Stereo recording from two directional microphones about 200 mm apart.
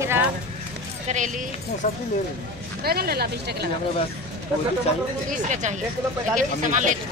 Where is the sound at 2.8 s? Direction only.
50° right (ahead or behind).